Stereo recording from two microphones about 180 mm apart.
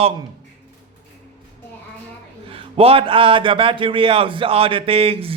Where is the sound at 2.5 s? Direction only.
30° right (ahead or behind).